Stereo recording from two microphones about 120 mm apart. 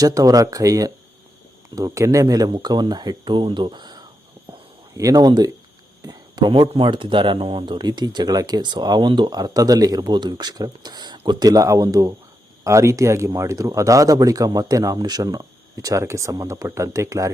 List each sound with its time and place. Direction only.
0.0 s speech: 30° right (ahead or behind)